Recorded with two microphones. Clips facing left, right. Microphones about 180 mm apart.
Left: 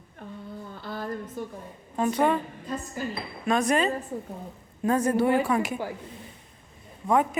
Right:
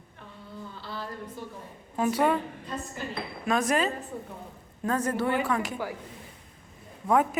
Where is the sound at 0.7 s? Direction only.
50° left (ahead or behind).